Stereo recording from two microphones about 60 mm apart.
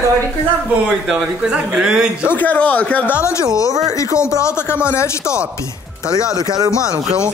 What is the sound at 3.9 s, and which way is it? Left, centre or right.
Speech, left.